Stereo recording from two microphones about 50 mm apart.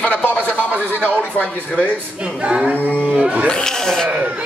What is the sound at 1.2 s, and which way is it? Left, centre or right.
Speech, left.